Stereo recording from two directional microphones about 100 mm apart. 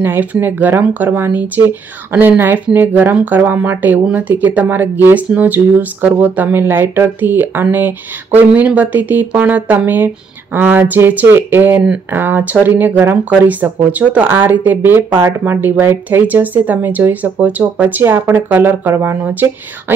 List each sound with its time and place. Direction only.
0.0 s speech: 20° right (ahead or behind)